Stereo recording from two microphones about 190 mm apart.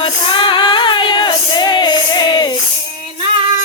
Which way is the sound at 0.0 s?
25° left (ahead or behind).